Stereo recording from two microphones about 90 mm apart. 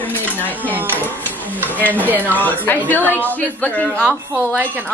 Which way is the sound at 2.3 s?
20° left (ahead or behind).